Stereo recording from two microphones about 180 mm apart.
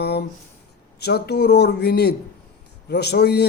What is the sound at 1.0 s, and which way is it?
A man's voice, 65° left (ahead or behind).